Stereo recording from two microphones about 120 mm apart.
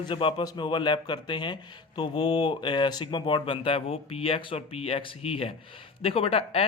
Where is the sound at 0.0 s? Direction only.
45° left (ahead or behind).